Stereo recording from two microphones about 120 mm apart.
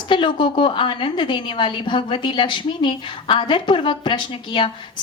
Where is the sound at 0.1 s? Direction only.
45° left (ahead or behind).